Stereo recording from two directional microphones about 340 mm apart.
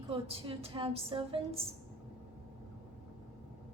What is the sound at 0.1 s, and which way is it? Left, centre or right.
A woman's voice, centre.